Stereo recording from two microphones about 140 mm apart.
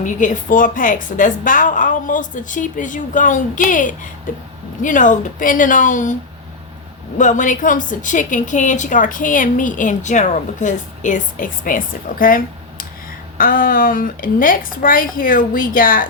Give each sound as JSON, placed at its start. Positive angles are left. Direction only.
{"t": 0.0, "sound": "a woman's voice", "side_deg": 65}
{"t": 7.2, "sound": "a woman's voice", "side_deg": 65}
{"t": 12.2, "sound": "a woman's voice", "side_deg": 90}